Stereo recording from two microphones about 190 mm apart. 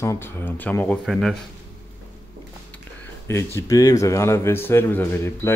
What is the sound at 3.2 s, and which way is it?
Speech, 15° left (ahead or behind).